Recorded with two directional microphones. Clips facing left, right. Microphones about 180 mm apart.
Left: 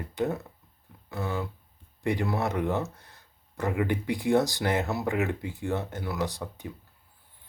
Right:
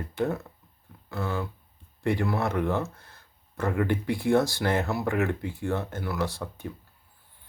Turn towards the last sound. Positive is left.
turn(degrees=15)  # may be behind; listen again after turning